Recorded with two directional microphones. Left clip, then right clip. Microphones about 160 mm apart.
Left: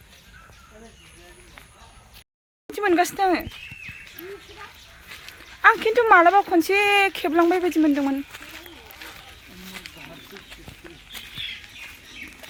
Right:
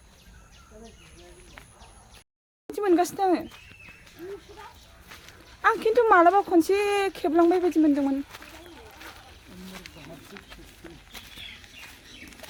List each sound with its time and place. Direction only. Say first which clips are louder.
2.7 s speech: left 3 dB; 5° right (ahead or behind)
5.6 s speech: left 4 dB; centre (ahead or behind)
7.3 s speech: left 1 dB; 10° left (ahead or behind)